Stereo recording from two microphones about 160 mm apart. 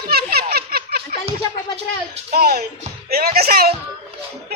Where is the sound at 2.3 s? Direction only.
75° right (ahead or behind).